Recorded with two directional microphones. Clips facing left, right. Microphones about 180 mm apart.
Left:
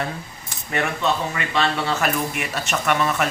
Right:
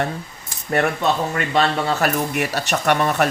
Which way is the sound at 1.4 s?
40° right (ahead or behind).